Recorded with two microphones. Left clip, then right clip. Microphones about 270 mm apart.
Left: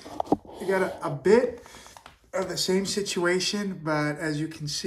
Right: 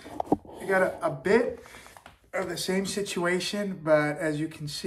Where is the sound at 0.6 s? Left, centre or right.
Centre.